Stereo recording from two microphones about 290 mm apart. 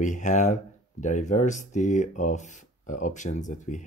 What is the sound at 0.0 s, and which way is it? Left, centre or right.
Speech, left.